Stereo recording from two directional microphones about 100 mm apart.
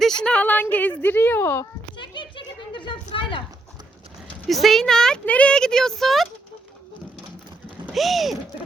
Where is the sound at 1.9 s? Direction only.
50° left (ahead or behind).